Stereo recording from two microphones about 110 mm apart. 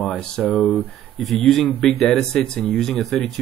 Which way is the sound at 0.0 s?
15° left (ahead or behind).